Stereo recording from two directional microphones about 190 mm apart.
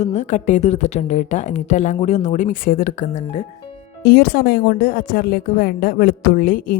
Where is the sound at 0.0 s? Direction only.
40° left (ahead or behind).